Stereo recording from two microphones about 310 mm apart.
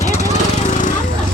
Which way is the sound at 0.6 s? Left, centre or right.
Left.